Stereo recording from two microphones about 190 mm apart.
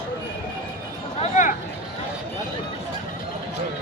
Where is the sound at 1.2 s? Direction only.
40° left (ahead or behind).